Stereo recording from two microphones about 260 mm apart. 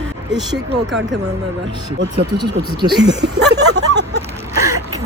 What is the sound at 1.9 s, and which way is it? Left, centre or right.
Speech, right.